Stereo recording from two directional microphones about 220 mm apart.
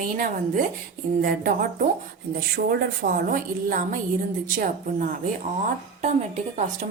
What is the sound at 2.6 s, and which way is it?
A woman's voice, 45° right (ahead or behind).